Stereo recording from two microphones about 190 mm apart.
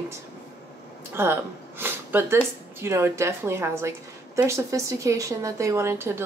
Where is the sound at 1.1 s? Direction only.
10° right (ahead or behind).